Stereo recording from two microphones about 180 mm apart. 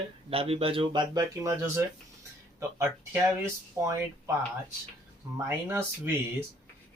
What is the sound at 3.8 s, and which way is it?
Speech, 15° right (ahead or behind).